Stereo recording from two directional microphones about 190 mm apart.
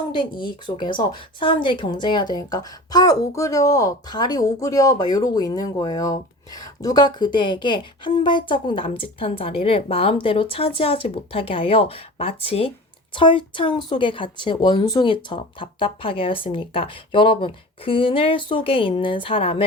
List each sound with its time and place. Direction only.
0.1 s speech: 25° left (ahead or behind)